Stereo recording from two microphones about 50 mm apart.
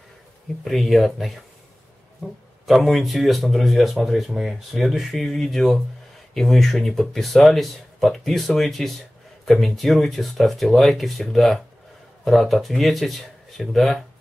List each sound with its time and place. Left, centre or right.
0.7 s speech: centre
2.6 s speech: centre